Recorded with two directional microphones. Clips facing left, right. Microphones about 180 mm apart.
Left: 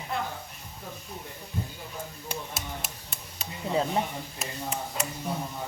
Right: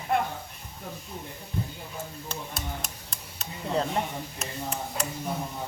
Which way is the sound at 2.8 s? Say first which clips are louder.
Even; 5° left (ahead or behind).